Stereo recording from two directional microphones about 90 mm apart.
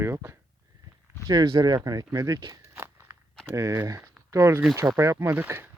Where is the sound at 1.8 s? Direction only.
45° right (ahead or behind).